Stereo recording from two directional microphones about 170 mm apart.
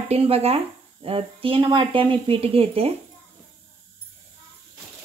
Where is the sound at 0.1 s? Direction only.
35° right (ahead or behind).